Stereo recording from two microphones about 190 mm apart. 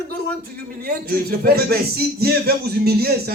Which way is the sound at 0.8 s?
55° right (ahead or behind).